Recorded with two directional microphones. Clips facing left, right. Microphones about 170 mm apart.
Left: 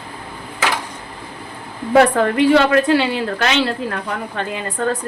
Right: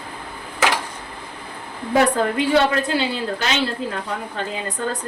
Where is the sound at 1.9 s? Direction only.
70° left (ahead or behind).